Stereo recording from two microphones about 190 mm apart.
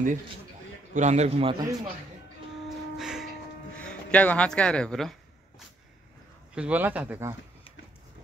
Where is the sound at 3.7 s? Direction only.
5° left (ahead or behind).